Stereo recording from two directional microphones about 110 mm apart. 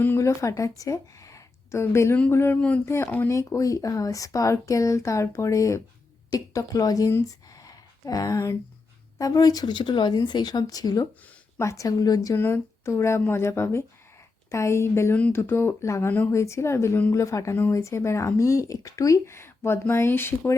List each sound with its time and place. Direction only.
0.0 s a woman's voice: 25° left (ahead or behind)
3.3 s speech: 30° left (ahead or behind)
7.6 s a sound: 35° left (ahead or behind)
9.1 s speech: 35° left (ahead or behind)
9.7 s speech: 45° left (ahead or behind)
12.4 s speech: 20° left (ahead or behind)